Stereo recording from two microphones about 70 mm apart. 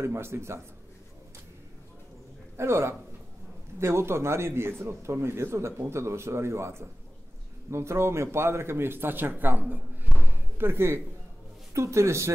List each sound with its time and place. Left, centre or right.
0.0 s a man's voice: right
2.5 s a man's voice: right
10.3 s slam: right
11.7 s a man's voice: right